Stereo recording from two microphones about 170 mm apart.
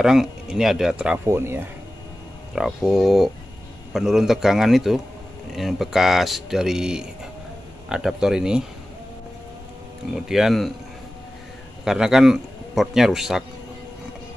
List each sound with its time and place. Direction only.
0.0 s speech: centre (ahead or behind)
2.5 s speech: centre (ahead or behind)
10.1 s speech: 5° right (ahead or behind)
11.8 s a man's voice: 5° right (ahead or behind)